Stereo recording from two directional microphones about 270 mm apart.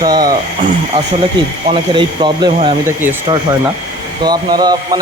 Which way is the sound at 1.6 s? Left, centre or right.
Centre.